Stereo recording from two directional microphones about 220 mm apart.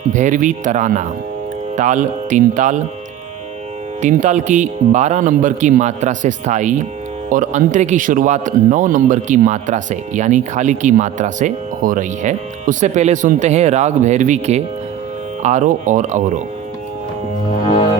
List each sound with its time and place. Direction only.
0.1 s speech: 35° right (ahead or behind)
4.0 s speech: 35° right (ahead or behind)